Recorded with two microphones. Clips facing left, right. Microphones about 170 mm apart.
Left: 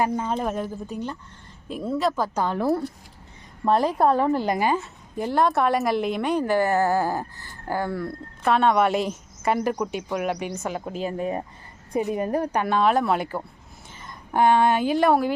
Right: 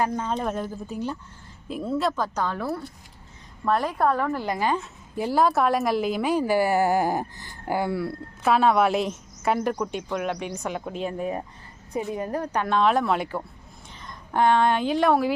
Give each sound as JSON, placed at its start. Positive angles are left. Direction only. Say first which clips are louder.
{"t": 0.0, "sound": "a woman's voice", "louder": "left 1 dB", "side_deg": 5}
{"t": 2.6, "sound": "a woman's voice", "louder": "left 7 dB", "side_deg": 35}
{"t": 4.7, "sound": "a woman's voice", "louder": "left 2 dB", "side_deg": 0}
{"t": 11.9, "sound": "a woman's voice", "louder": "left 4 dB", "side_deg": 15}